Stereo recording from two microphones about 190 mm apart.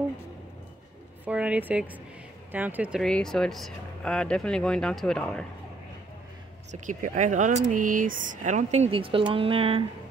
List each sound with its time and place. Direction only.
1.2 s speech: 5° right (ahead or behind)
6.7 s speech: 40° right (ahead or behind)